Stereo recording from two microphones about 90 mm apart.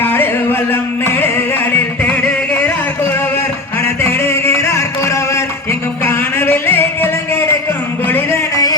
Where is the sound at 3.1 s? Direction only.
25° left (ahead or behind).